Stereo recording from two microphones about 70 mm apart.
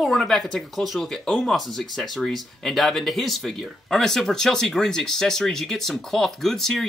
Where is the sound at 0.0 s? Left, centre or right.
Centre.